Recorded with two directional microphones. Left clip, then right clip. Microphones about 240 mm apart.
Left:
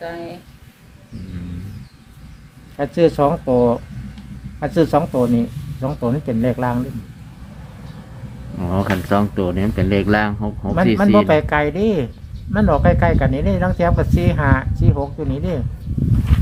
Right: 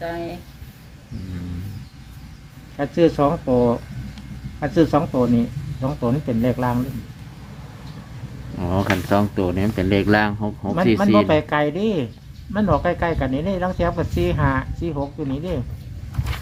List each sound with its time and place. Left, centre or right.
0.0 s speech: centre
2.7 s speech: left
8.5 s speech: centre
11.3 s speech: left
16.3 s a sound: right